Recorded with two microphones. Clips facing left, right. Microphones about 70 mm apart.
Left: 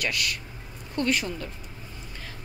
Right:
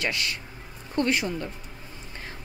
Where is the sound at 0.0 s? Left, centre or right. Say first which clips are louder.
Even; right.